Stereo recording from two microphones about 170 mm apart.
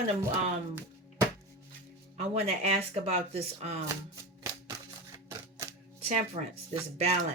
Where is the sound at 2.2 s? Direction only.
40° right (ahead or behind).